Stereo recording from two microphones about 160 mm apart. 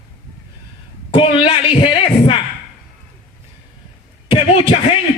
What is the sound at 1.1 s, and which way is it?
Speech, 35° left (ahead or behind).